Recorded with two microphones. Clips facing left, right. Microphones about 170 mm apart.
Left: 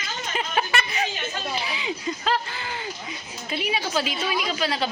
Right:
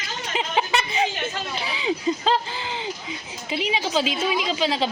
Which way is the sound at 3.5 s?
20° right (ahead or behind).